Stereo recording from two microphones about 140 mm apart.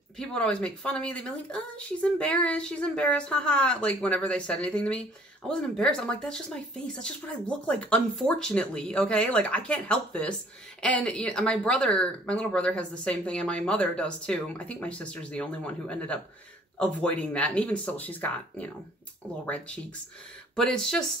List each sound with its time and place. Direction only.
0.2 s speech: 5° left (ahead or behind)